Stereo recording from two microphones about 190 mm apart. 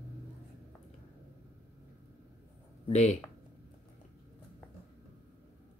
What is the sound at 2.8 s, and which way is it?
Speech, 35° left (ahead or behind).